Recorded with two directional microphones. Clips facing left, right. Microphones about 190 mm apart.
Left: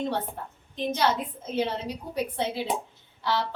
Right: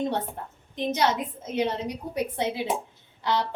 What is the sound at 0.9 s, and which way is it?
A woman's voice, 20° right (ahead or behind).